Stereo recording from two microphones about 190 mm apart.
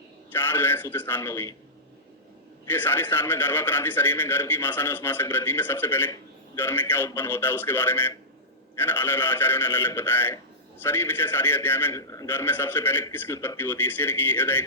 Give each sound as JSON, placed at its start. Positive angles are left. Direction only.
{"t": 0.3, "sound": "a man's voice", "side_deg": 10}
{"t": 2.6, "sound": "a man's voice", "side_deg": 10}